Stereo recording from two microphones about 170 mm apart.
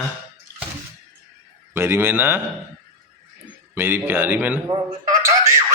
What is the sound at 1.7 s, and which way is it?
Speech, 15° right (ahead or behind).